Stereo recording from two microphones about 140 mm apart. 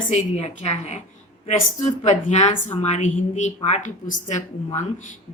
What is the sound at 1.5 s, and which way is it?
A woman's voice, 65° left (ahead or behind).